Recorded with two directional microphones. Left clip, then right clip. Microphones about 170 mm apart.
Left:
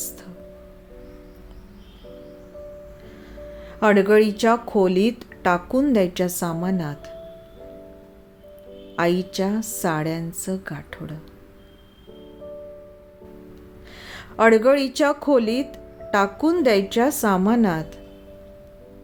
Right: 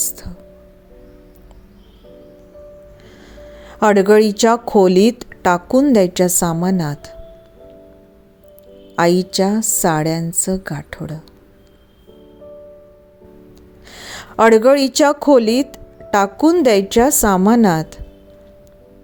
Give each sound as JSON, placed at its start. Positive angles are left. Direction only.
{"t": 3.3, "sound": "speech", "side_deg": -45}
{"t": 9.0, "sound": "a woman's voice", "side_deg": -45}
{"t": 13.9, "sound": "speech", "side_deg": -45}